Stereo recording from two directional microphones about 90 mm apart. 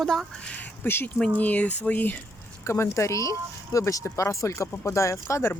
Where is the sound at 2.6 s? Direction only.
30° left (ahead or behind).